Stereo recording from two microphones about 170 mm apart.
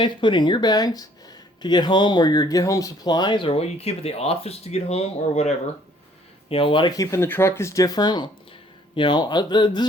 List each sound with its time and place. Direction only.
0.0 s speech: 30° left (ahead or behind)